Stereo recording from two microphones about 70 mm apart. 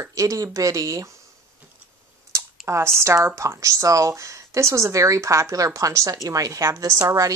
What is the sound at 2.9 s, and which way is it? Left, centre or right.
Speech, right.